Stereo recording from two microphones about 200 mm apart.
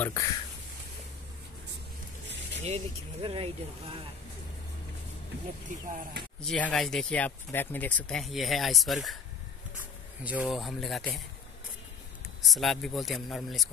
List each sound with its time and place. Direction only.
0.0 s speech: 15° left (ahead or behind)
2.6 s speech: 30° right (ahead or behind)
5.7 s speech: 40° right (ahead or behind)
6.4 s speech: 5° left (ahead or behind)
10.2 s speech: 5° right (ahead or behind)
12.4 s speech: centre (ahead or behind)